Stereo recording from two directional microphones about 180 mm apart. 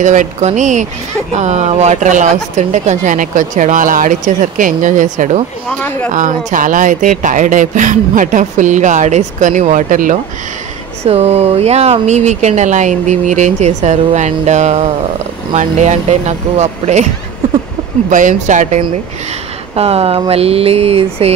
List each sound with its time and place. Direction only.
0.0 s speech: 45° right (ahead or behind)
5.7 s speech: 10° left (ahead or behind)
6.1 s speech: 45° right (ahead or behind)
11.1 s speech: 35° right (ahead or behind)
18.1 s speech: 45° right (ahead or behind)